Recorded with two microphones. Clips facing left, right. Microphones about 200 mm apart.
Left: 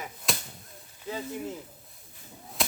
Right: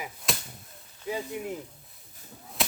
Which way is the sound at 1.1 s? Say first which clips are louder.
Right 3 dB; 15° right (ahead or behind).